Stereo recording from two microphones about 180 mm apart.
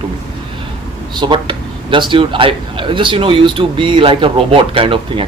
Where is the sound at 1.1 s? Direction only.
25° right (ahead or behind).